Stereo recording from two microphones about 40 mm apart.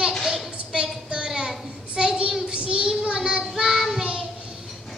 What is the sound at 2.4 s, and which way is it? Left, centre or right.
Child singing, right.